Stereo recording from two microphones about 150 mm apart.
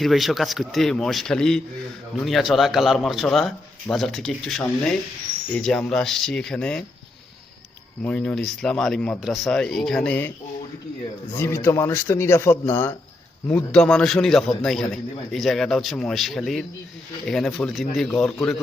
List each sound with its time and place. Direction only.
0.0 s a man's voice: centre (ahead or behind)
8.0 s a man's voice: 5° left (ahead or behind)
11.3 s a man's voice: 15° left (ahead or behind)
13.7 s a man's voice: 5° left (ahead or behind)